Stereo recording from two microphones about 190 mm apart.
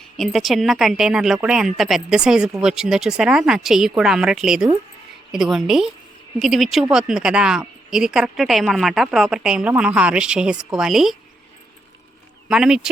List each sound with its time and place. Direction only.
0.2 s a woman's voice: centre (ahead or behind)
12.5 s a woman's voice: 5° right (ahead or behind)